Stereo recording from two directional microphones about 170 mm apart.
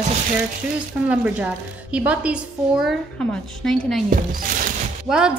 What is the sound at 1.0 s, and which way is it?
A woman's voice, 5° right (ahead or behind).